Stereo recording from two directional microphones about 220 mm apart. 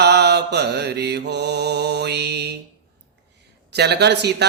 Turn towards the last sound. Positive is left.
turn(degrees=-50)  # may be behind; listen again after turning